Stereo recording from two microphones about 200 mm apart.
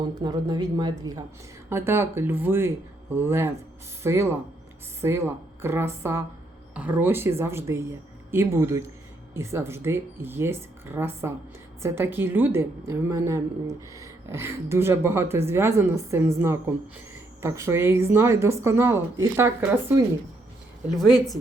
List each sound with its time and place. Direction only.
0.2 s a woman's voice: 20° right (ahead or behind)